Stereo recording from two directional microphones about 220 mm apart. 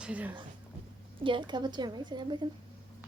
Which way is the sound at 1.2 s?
20° right (ahead or behind).